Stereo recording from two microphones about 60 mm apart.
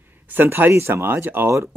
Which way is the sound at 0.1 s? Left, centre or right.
Right.